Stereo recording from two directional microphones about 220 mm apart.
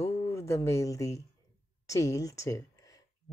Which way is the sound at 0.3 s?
15° left (ahead or behind).